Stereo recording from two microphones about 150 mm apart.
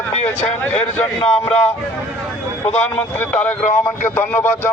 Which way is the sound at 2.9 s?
10° left (ahead or behind).